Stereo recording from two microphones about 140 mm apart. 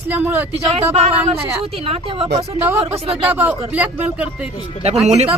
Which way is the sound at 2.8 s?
40° right (ahead or behind).